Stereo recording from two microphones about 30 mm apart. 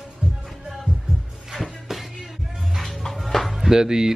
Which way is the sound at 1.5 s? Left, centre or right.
Centre.